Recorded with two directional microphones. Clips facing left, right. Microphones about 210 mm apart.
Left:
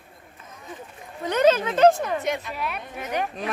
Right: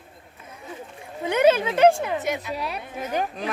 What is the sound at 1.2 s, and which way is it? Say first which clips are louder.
Speech: right 1 dB; 10° right (ahead or behind).